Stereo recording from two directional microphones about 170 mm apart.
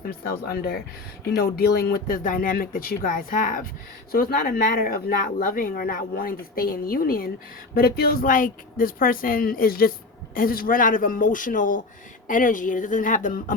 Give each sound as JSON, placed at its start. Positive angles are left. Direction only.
{"t": 0.0, "sound": "a man's voice", "side_deg": 65}